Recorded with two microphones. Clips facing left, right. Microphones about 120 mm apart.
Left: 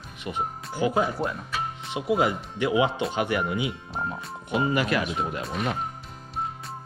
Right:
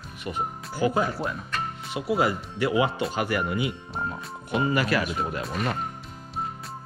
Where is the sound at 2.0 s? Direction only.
20° left (ahead or behind).